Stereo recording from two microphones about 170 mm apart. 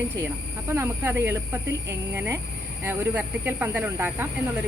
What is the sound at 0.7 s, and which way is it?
Speech, 15° right (ahead or behind).